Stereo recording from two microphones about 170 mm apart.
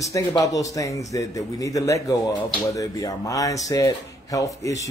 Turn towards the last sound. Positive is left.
turn(degrees=20)  # may be behind; listen again after turning